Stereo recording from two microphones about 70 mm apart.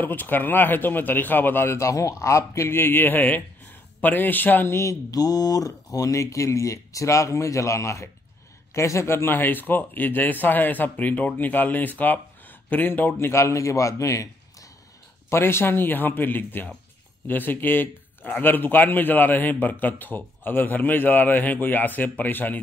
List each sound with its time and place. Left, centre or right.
0.0 s speech: left
5.1 s speech: left
13.3 s a man's voice: left
15.2 s a man's voice: left